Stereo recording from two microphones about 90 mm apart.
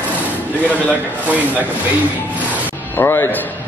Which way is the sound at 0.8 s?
15° left (ahead or behind).